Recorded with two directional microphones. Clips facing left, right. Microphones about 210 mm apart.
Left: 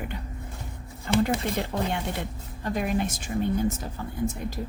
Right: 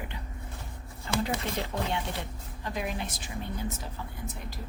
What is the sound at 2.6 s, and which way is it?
Speech, 50° left (ahead or behind).